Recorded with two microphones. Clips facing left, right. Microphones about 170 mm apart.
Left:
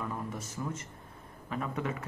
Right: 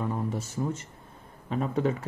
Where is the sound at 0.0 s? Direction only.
30° right (ahead or behind).